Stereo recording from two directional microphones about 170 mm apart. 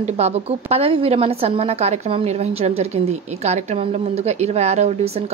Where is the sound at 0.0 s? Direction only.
40° right (ahead or behind).